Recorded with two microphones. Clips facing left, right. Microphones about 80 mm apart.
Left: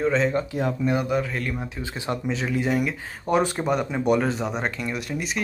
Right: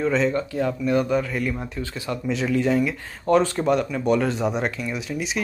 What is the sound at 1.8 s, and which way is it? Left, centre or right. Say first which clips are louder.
Speech: even; left.